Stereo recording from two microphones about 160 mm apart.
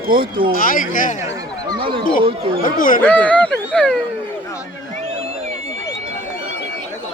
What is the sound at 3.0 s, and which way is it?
Speech, 10° left (ahead or behind).